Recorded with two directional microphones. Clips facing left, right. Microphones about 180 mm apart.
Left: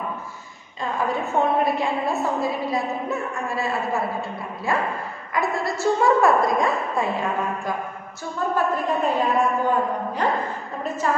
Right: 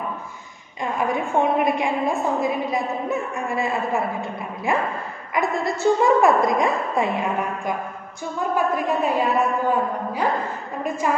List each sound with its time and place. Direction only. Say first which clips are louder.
0.9 s a woman's voice: right 1 dB; 15° right (ahead or behind)